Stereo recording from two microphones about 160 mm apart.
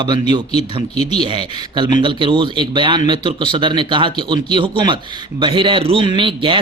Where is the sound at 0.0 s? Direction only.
30° right (ahead or behind).